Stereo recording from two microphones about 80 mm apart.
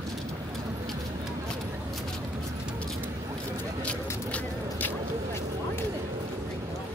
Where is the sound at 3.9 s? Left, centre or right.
Centre.